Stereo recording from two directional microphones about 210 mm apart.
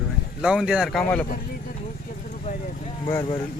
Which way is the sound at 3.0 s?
20° left (ahead or behind).